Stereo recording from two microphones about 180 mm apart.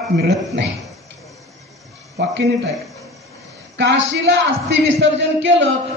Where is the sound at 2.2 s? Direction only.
70° right (ahead or behind).